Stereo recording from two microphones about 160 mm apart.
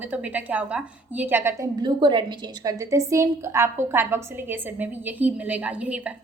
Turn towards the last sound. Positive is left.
turn(degrees=-10)  # may be behind; listen again after turning